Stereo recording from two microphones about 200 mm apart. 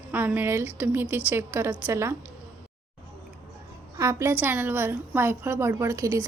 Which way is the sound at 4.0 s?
15° right (ahead or behind).